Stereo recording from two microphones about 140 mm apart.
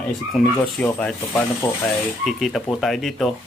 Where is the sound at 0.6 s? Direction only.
5° left (ahead or behind).